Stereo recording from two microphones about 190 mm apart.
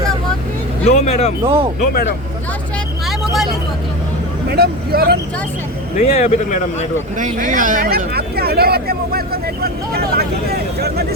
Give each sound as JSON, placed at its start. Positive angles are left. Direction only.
{"t": 0.9, "sound": "speech", "side_deg": 35}
{"t": 1.5, "sound": "speech", "side_deg": -30}
{"t": 1.8, "sound": "speech", "side_deg": 50}
{"t": 4.5, "sound": "speech", "side_deg": -55}
{"t": 6.0, "sound": "speech", "side_deg": 35}
{"t": 7.2, "sound": "speech", "side_deg": -45}